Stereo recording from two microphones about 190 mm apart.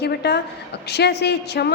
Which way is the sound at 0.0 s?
60° left (ahead or behind).